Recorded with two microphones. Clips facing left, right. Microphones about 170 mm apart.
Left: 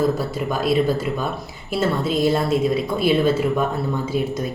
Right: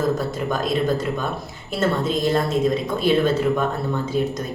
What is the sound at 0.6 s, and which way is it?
Speech, 5° left (ahead or behind).